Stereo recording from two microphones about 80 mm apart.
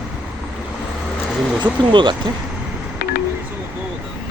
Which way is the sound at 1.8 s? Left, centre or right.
Right.